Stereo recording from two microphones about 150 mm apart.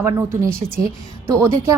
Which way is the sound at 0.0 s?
15° right (ahead or behind).